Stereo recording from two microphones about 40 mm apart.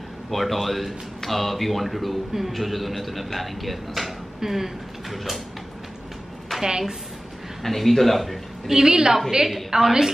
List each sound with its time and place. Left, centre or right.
0.3 s speech: centre
6.5 s a sound: centre
7.6 s speech: centre
8.6 s a woman's voice: centre